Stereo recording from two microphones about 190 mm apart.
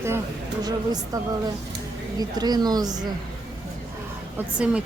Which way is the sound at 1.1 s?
20° right (ahead or behind).